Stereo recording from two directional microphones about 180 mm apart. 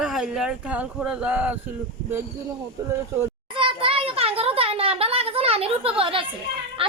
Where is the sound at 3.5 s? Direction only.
30° right (ahead or behind).